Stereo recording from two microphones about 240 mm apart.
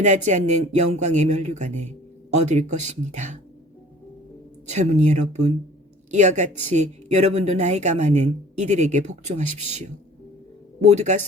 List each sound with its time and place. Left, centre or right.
0.0 s speech: right
4.6 s speech: right
10.8 s speech: right